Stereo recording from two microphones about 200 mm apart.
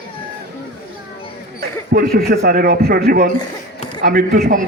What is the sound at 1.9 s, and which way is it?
A man's voice, 50° right (ahead or behind).